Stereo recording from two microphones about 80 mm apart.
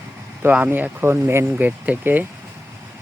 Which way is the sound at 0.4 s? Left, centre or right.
Right.